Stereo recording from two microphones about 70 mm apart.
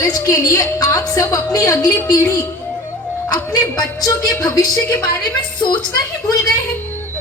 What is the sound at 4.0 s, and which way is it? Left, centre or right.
Speech, left.